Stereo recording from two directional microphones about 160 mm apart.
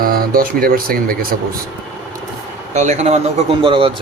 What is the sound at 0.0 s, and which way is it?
Speech, 65° right (ahead or behind).